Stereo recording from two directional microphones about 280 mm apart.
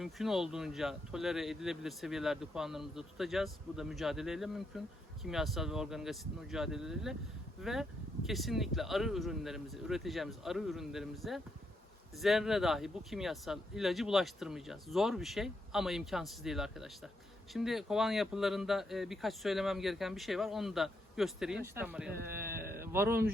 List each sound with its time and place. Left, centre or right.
0.0 s speech: centre
22.1 s speech: right
22.8 s speech: centre